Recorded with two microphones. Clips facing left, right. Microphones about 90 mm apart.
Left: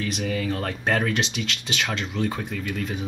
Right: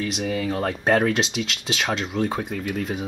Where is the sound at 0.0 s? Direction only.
15° right (ahead or behind).